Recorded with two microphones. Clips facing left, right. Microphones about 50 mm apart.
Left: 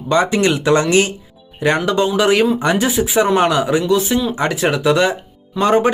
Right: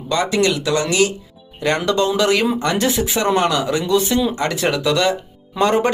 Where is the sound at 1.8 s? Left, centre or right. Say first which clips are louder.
Right 1 dB; centre.